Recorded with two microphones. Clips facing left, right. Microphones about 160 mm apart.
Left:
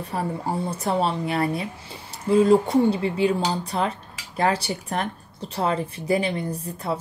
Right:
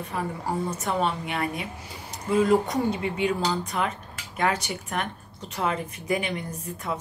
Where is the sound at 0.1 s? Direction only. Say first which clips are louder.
Left 3 dB; 35° left (ahead or behind).